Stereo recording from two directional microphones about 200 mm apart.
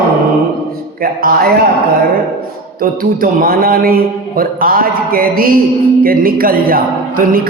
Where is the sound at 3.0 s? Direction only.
45° right (ahead or behind).